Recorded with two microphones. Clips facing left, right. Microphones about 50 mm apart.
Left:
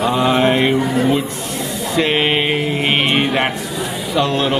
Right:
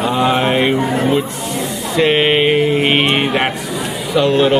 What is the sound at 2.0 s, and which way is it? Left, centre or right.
Speech, centre.